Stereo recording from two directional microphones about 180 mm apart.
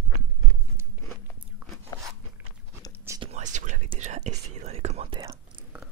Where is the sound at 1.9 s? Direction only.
20° left (ahead or behind).